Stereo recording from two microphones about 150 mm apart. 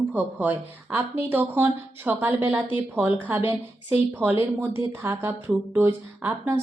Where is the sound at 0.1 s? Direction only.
10° right (ahead or behind).